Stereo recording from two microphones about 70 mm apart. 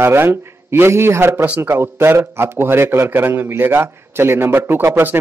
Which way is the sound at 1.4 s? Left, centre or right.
Right.